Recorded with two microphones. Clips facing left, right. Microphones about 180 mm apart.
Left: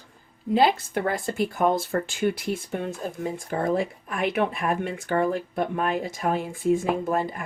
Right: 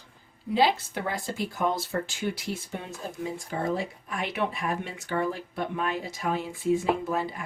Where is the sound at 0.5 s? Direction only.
50° left (ahead or behind).